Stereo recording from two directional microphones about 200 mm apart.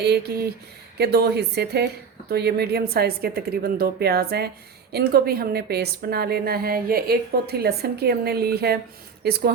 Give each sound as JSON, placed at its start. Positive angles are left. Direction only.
{"t": 0.0, "sound": "a woman's voice", "side_deg": -55}